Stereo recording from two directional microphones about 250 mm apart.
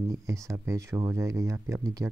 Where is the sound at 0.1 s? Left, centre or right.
Centre.